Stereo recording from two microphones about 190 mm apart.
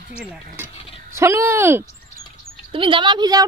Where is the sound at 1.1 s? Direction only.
15° right (ahead or behind).